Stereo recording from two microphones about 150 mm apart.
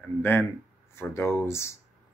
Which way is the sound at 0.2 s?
15° left (ahead or behind).